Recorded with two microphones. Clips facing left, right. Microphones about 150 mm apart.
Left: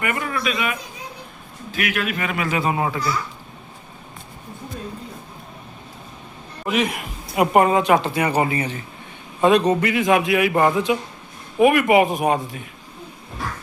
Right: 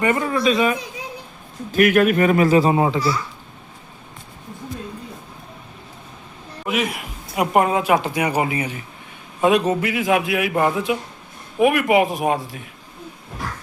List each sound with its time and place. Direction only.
0.0 s a man's voice: 30° right (ahead or behind)
1.7 s a man's voice: 50° right (ahead or behind); by 3.0 s 25° right (ahead or behind)
6.7 s a woman's voice: centre (ahead or behind)